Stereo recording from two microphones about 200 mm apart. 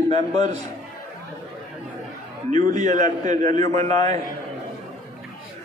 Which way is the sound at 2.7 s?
35° right (ahead or behind).